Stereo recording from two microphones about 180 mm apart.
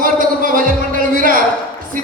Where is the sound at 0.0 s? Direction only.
50° right (ahead or behind).